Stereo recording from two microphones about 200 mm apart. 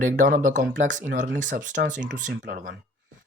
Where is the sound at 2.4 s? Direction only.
50° right (ahead or behind).